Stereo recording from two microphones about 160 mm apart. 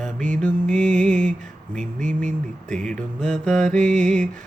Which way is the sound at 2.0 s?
50° right (ahead or behind).